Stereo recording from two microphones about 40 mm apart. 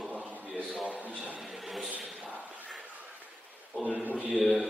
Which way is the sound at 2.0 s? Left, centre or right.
Right.